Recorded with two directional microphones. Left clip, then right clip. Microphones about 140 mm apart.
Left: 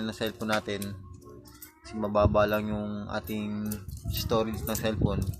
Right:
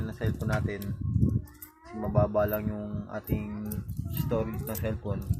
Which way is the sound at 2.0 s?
25° left (ahead or behind).